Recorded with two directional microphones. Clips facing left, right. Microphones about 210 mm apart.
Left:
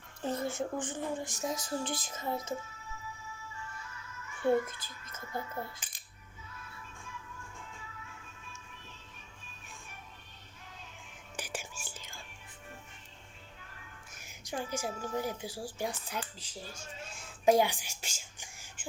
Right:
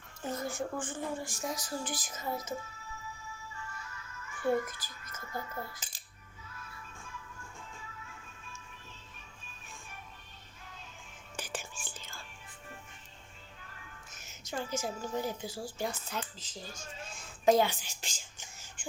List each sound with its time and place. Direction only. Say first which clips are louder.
0.2 s speech: left 2 dB; 30° left (ahead or behind)
4.4 s speech: left 2 dB; 25° left (ahead or behind)
11.3 s whispering: even; 10° left (ahead or behind)
14.1 s a woman's voice: left 1 dB; 10° left (ahead or behind)